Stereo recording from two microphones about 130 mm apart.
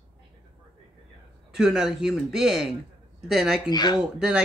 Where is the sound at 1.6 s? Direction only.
5° right (ahead or behind).